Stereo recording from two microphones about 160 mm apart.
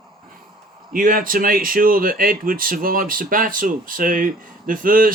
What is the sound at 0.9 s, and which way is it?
Speech, 60° right (ahead or behind).